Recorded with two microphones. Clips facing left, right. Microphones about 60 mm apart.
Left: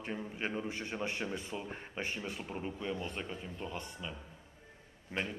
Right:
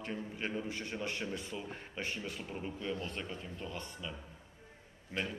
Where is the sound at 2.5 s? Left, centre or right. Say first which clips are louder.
Even; centre.